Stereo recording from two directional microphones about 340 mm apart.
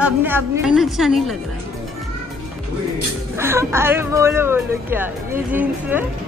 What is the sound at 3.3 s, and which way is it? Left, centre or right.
Speech, centre.